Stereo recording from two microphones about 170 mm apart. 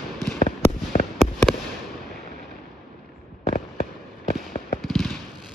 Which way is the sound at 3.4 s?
45° left (ahead or behind).